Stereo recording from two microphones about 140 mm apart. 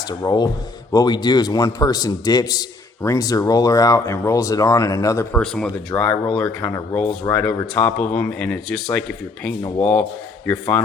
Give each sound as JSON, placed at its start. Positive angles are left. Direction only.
{"t": 0.1, "sound": "a man's voice", "side_deg": 30}
{"t": 5.3, "sound": "speech", "side_deg": 5}
{"t": 6.4, "sound": "a man's voice", "side_deg": 15}
{"t": 7.2, "sound": "a man's voice", "side_deg": 20}